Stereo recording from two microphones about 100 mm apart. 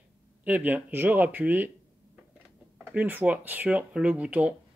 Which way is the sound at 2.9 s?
15° right (ahead or behind).